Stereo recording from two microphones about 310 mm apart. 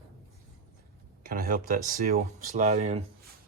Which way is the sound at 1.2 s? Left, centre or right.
Right.